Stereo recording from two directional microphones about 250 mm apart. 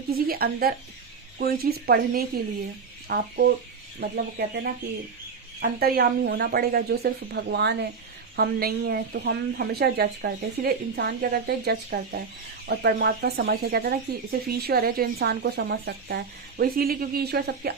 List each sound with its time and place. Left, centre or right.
0.1 s speech: right